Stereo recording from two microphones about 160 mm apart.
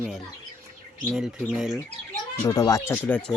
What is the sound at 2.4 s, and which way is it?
Speech, 20° left (ahead or behind).